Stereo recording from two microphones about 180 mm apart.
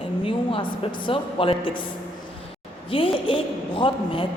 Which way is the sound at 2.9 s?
30° left (ahead or behind).